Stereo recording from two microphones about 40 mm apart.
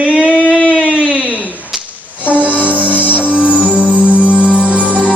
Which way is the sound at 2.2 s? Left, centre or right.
Right.